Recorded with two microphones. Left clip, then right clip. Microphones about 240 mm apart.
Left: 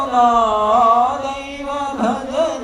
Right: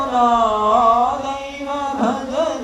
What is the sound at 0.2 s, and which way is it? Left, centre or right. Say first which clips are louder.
Chant: left 2 dB; left.